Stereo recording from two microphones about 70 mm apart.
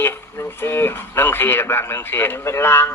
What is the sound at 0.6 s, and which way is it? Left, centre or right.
A man's voice, left.